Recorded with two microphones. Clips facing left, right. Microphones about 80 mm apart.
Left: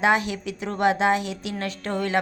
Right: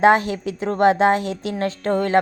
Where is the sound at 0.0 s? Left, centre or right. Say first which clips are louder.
Right 6 dB; right.